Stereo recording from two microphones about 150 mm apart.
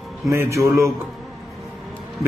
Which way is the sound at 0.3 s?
20° right (ahead or behind).